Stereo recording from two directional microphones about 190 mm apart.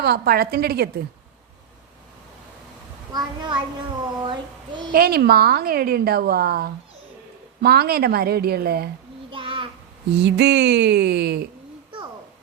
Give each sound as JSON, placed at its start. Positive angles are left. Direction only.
{"t": 0.0, "sound": "a woman's voice", "side_deg": -55}
{"t": 3.1, "sound": "a child's voice", "side_deg": -20}
{"t": 4.2, "sound": "child singing", "side_deg": -25}
{"t": 4.9, "sound": "a woman's voice", "side_deg": -55}
{"t": 9.3, "sound": "child singing", "side_deg": -25}
{"t": 10.2, "sound": "a woman's voice", "side_deg": -65}